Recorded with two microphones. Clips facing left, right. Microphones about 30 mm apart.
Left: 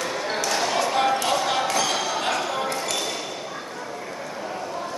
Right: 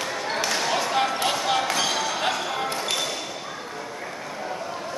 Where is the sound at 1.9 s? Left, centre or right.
Centre.